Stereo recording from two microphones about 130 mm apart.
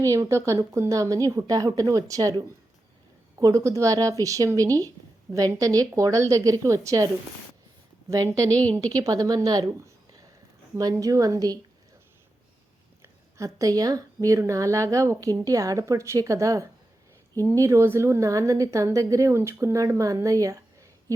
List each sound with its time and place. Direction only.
0.0 s speech: 25° right (ahead or behind)
8.1 s a woman's voice: 25° right (ahead or behind)
13.0 s speech: 25° right (ahead or behind)